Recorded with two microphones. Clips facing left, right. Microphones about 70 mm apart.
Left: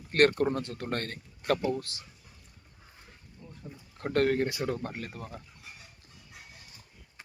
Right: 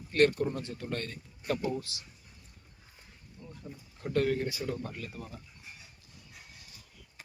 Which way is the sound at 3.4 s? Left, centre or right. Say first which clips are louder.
Right 1 dB; centre.